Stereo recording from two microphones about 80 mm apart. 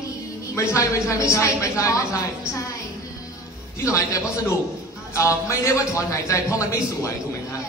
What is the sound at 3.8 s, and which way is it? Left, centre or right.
A man's voice, left.